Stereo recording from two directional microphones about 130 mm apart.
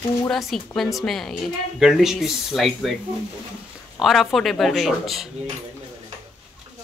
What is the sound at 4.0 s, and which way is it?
A woman's voice, centre (ahead or behind).